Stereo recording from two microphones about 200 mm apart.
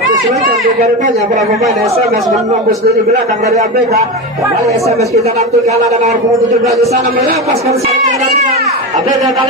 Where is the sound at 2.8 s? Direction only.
40° right (ahead or behind).